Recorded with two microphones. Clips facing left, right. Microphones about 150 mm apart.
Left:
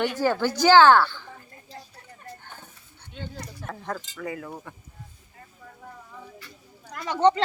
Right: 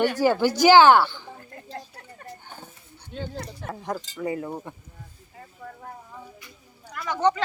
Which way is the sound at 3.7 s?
15° right (ahead or behind).